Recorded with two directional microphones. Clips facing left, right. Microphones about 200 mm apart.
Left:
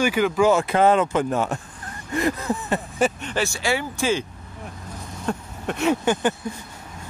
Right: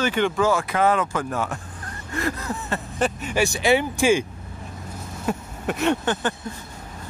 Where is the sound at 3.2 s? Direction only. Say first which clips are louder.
Right 3 dB; 15° right (ahead or behind).